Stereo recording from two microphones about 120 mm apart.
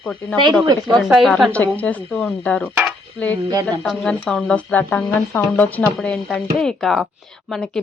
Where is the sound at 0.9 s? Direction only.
Centre (ahead or behind).